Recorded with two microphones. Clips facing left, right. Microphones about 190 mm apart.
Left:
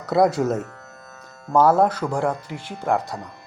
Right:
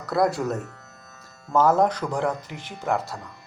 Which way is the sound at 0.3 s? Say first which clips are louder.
Left 5 dB; 20° left (ahead or behind).